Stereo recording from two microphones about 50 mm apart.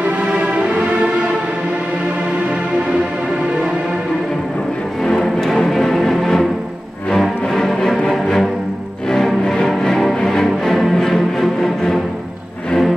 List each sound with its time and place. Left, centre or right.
0.3 s music: right
5.0 s music: centre